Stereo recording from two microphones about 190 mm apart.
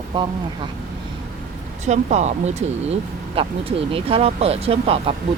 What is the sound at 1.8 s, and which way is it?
Speech, 40° right (ahead or behind).